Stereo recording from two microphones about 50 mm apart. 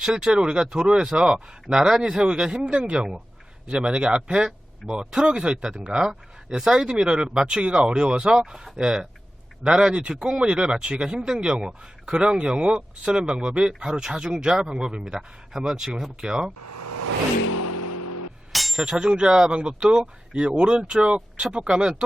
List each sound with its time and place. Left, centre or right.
0.0 s speech: centre
18.5 s a sound: centre
18.9 s speech: centre